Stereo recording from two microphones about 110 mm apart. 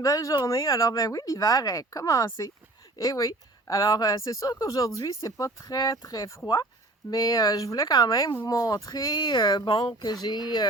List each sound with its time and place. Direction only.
0.0 s speech: 30° left (ahead or behind)